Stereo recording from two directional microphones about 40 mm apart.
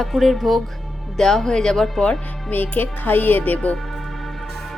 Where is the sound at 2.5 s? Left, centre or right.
Left.